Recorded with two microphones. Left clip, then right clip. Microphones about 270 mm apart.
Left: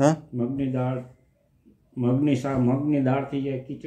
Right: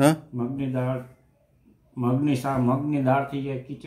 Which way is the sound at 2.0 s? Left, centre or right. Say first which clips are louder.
Left 1 dB; centre.